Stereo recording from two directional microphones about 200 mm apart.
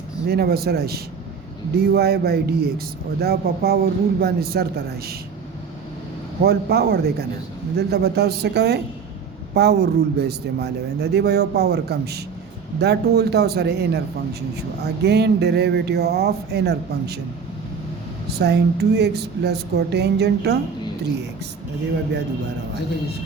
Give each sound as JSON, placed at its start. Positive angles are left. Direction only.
{"t": 0.3, "sound": "a man's voice", "side_deg": -50}
{"t": 6.4, "sound": "a man's voice", "side_deg": -50}
{"t": 18.3, "sound": "speech", "side_deg": -55}